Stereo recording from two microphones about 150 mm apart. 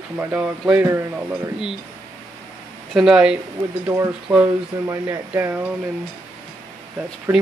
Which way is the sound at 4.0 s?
15° right (ahead or behind).